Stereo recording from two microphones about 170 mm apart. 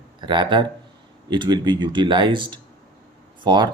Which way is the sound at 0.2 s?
30° right (ahead or behind).